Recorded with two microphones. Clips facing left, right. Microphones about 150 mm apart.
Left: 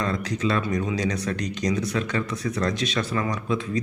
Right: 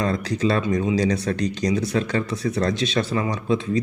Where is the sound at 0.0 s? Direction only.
35° right (ahead or behind).